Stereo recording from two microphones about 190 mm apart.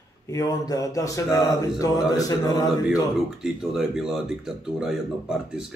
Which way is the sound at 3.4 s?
Centre (ahead or behind).